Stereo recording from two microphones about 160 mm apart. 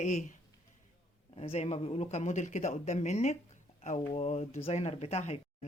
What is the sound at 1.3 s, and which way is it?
Speech, 35° left (ahead or behind).